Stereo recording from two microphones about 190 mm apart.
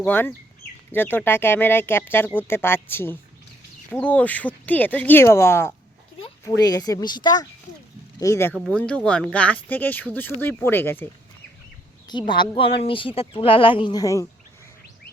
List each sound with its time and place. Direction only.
0.1 s speech: 10° left (ahead or behind)
8.5 s speech: 5° left (ahead or behind)
12.3 s speech: 25° left (ahead or behind)